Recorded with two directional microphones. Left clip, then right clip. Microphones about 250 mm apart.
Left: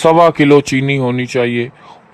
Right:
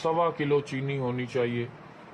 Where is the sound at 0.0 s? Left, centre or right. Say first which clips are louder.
Left 17 dB; left.